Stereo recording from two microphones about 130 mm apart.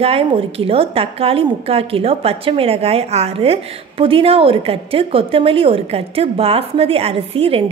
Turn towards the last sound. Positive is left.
turn(degrees=-45)  # may be behind; listen again after turning